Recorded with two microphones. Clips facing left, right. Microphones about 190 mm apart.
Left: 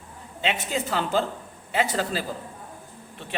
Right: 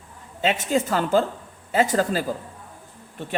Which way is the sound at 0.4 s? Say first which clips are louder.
Right 5 dB; 45° right (ahead or behind).